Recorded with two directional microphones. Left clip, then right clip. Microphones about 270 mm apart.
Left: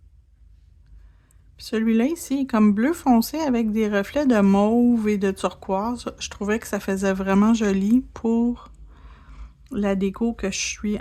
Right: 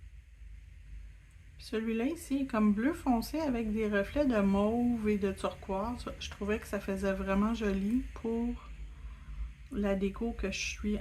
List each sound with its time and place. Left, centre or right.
1.5 s speech: left
9.6 s speech: left